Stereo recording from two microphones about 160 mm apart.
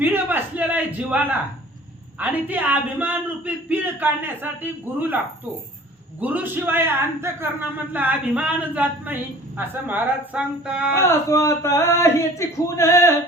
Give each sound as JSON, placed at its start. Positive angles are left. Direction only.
{"t": 0.0, "sound": "a sound", "side_deg": -10}
{"t": 2.1, "sound": "a man's voice", "side_deg": -10}
{"t": 10.9, "sound": "speech", "side_deg": 15}